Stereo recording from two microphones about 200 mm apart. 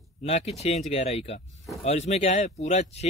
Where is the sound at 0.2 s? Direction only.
30° left (ahead or behind).